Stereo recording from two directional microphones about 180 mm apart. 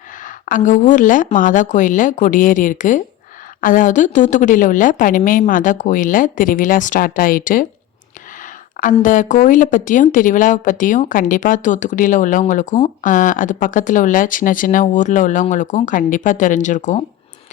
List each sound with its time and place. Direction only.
0.2 s speech: 45° left (ahead or behind)
8.8 s speech: 45° left (ahead or behind)